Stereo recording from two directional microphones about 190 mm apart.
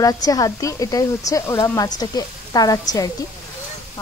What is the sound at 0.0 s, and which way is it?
Speech, 20° left (ahead or behind).